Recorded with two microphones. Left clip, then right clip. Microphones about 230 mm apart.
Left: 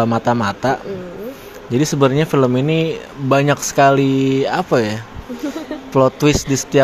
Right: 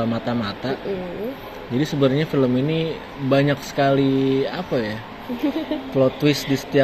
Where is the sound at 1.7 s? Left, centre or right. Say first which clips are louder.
Left 5 dB; left.